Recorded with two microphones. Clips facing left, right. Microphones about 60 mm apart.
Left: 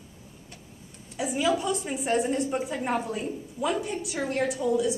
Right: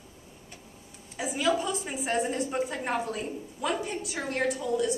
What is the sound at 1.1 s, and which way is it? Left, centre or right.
A woman's voice, centre.